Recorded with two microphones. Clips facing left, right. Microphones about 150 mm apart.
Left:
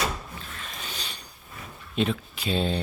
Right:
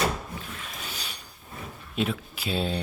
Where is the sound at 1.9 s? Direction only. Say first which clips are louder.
Left 2 dB; 5° right (ahead or behind).